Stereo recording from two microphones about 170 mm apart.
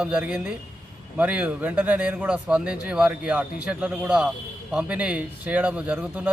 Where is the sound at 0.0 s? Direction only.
5° right (ahead or behind).